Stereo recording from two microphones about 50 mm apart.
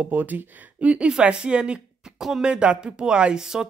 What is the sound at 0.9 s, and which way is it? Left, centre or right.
Speech, right.